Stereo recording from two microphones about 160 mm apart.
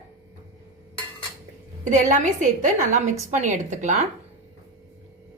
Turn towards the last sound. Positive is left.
turn(degrees=-50)  # may be behind; listen again after turning